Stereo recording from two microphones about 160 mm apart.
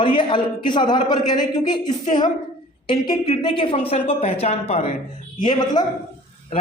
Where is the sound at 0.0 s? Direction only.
30° left (ahead or behind).